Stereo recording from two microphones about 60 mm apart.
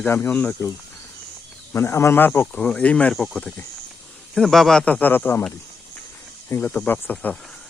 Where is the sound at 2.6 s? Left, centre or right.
Centre.